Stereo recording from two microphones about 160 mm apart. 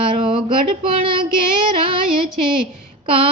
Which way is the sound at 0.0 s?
35° right (ahead or behind).